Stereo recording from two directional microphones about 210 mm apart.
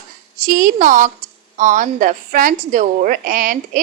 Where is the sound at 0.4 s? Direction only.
40° right (ahead or behind).